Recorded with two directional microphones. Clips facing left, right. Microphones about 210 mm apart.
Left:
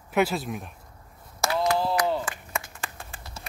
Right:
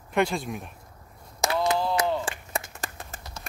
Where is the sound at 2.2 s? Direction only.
35° right (ahead or behind).